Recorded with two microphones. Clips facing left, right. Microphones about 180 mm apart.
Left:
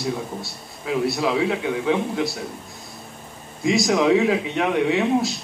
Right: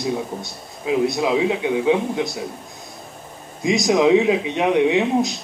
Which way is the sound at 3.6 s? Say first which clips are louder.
Right 2 dB; 20° right (ahead or behind).